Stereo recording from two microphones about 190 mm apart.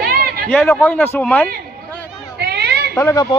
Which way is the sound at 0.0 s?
55° right (ahead or behind).